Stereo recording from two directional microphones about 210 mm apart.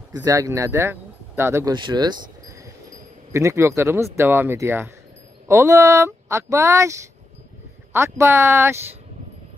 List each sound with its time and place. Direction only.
0.1 s speech: 15° right (ahead or behind)